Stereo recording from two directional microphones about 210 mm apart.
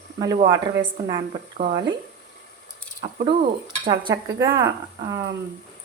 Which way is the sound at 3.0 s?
25° right (ahead or behind).